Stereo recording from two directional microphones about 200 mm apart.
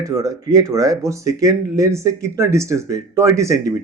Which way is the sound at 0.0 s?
15° right (ahead or behind).